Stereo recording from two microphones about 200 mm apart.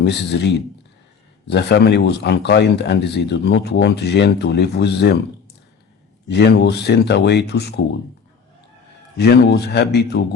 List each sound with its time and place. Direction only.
0.0 s speech: 55° left (ahead or behind)
6.2 s speech: 55° left (ahead or behind)
9.1 s speech: 55° left (ahead or behind)